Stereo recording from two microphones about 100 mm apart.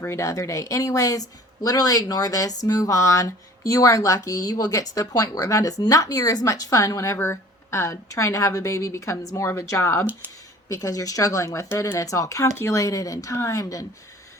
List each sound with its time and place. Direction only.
0.0 s speech: 30° left (ahead or behind)